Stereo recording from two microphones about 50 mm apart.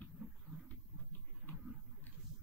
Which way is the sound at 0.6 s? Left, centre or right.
Left.